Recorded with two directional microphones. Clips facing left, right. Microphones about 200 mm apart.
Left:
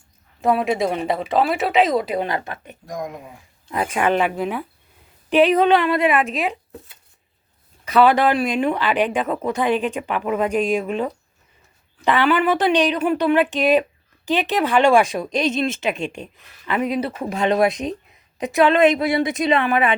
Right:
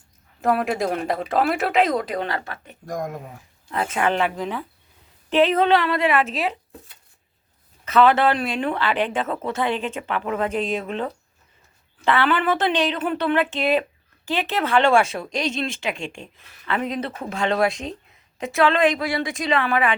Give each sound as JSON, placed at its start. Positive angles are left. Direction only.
{"t": 0.4, "sound": "speech", "side_deg": 0}
{"t": 7.9, "sound": "speech", "side_deg": 15}